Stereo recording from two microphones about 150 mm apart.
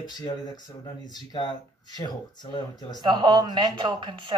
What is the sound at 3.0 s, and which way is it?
Speech, 30° right (ahead or behind).